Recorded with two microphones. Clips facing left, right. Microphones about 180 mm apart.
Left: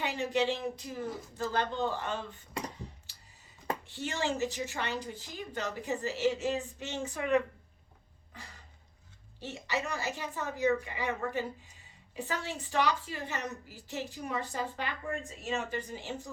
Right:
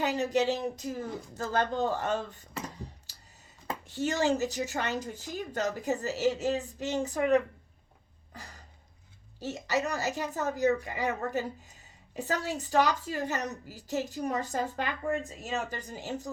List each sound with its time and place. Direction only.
0.0 s a woman's voice: 40° right (ahead or behind)
3.1 s a sound: 40° right (ahead or behind)
3.8 s a woman's voice: 40° right (ahead or behind)
9.4 s a woman's voice: 40° right (ahead or behind)